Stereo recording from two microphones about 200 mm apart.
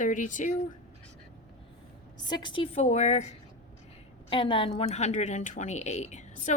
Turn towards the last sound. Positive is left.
turn(degrees=35)  # may be behind; listen again after turning